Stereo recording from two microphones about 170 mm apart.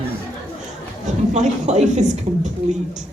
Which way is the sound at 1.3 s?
45° right (ahead or behind).